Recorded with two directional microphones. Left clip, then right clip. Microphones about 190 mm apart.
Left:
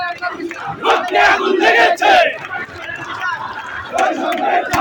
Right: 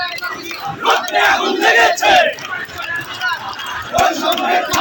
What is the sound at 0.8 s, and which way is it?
Battle cry, 35° left (ahead or behind).